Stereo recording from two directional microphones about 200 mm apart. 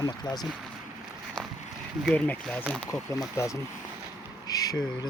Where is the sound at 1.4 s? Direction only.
5° left (ahead or behind).